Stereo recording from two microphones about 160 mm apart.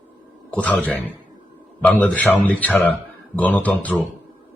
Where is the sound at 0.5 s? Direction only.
10° left (ahead or behind).